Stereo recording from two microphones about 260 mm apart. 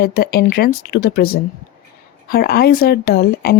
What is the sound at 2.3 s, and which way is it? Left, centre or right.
A woman's voice, left.